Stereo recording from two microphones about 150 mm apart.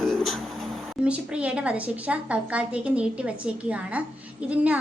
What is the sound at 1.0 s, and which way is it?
A woman's voice, 10° right (ahead or behind).